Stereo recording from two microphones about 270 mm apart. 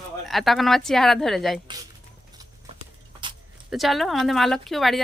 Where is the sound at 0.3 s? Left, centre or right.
Centre.